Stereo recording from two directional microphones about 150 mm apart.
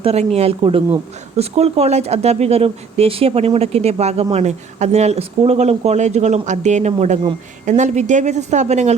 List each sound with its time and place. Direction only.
0.0 s speech: 45° right (ahead or behind)